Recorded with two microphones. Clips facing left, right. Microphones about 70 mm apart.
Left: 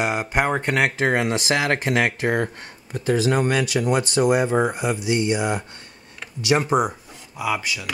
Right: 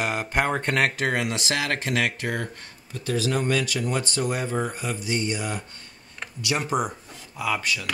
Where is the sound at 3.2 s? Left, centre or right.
Left.